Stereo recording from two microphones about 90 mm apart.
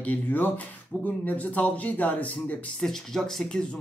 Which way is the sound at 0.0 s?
20° left (ahead or behind).